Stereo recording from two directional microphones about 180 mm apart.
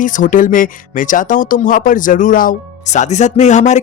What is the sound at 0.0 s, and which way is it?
Speech, 45° left (ahead or behind).